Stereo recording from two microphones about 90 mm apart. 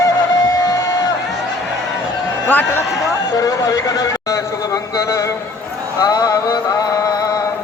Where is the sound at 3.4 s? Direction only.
40° left (ahead or behind).